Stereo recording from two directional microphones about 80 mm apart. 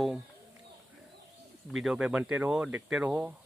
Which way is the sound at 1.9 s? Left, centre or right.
Centre.